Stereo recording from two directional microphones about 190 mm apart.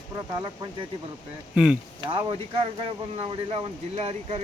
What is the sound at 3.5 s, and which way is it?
Speech, 30° right (ahead or behind).